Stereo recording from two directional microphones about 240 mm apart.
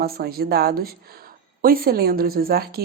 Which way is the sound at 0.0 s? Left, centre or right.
Right.